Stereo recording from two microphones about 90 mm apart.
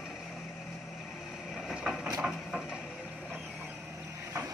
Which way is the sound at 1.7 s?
5° right (ahead or behind).